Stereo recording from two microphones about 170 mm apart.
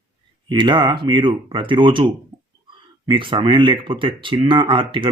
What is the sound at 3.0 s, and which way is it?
Speech, 30° right (ahead or behind).